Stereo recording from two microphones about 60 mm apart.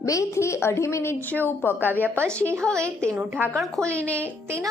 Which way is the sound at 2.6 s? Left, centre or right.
Centre.